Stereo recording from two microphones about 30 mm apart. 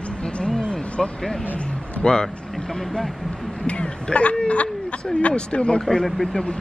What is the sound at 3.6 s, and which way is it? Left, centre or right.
Speech, left.